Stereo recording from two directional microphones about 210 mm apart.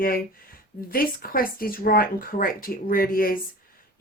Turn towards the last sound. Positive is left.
turn(degrees=40)  # may be behind; listen again after turning